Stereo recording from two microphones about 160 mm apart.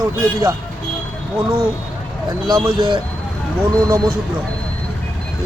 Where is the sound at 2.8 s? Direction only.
30° right (ahead or behind).